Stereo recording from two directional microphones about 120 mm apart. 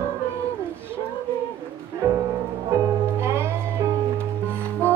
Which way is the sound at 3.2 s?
20° right (ahead or behind).